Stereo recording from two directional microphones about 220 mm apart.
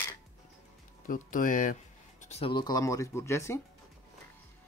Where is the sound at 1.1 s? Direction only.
35° left (ahead or behind); by 3.6 s 10° left (ahead or behind).